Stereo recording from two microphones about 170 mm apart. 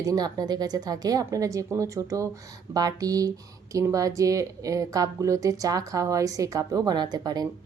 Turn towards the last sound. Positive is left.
turn(degrees=-25)  # may be behind; listen again after turning